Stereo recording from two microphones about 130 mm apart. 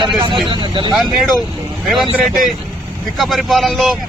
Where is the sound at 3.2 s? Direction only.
Centre (ahead or behind).